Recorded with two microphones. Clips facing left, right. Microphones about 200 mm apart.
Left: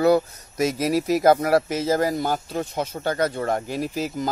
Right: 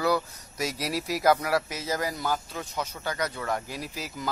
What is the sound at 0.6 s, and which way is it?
Speech, 50° left (ahead or behind).